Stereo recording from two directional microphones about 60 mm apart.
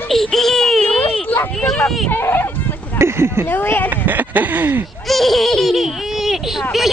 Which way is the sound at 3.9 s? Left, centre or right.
Right.